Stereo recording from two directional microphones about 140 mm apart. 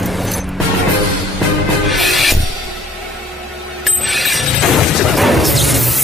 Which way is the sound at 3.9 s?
Centre (ahead or behind).